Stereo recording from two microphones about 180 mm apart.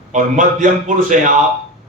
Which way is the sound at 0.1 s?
45° right (ahead or behind).